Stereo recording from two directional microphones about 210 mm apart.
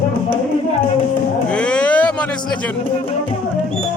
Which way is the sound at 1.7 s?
5° left (ahead or behind).